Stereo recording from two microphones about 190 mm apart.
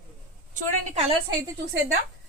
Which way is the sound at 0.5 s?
35° right (ahead or behind).